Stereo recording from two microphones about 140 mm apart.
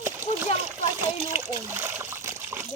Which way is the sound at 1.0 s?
15° right (ahead or behind).